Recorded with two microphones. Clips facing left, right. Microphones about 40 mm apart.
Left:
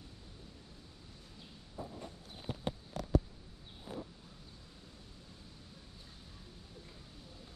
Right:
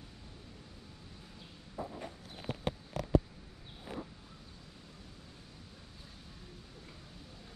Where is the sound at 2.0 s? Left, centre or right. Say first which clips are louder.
Right 3 dB; right.